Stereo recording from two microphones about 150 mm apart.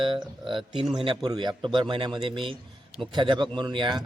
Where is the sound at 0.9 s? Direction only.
35° right (ahead or behind).